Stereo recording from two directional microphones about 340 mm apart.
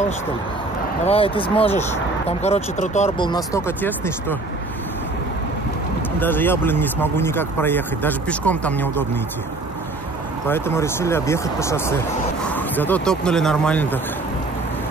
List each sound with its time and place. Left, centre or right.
1.0 s speech: centre
6.1 s speech: centre
10.5 s speech: centre